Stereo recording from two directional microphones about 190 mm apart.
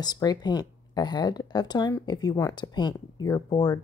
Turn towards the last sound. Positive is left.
turn(degrees=20)  # may be behind; listen again after turning